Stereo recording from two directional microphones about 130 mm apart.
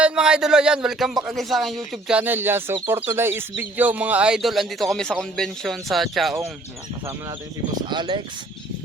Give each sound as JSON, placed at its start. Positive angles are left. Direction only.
{"t": 0.0, "sound": "a man's voice", "side_deg": -5}
{"t": 7.9, "sound": "speech", "side_deg": -35}